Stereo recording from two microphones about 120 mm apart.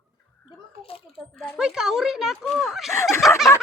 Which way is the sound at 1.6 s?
5° right (ahead or behind).